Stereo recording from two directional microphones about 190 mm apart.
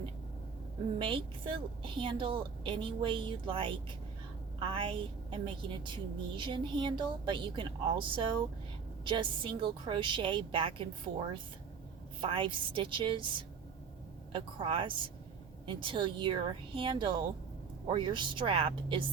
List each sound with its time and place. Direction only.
0.9 s a woman's voice: 25° right (ahead or behind)
12.2 s a woman's voice: 25° right (ahead or behind)